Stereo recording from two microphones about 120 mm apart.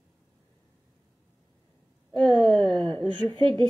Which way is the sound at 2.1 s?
5° left (ahead or behind).